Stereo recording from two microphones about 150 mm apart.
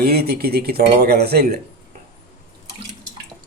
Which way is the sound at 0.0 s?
90° right.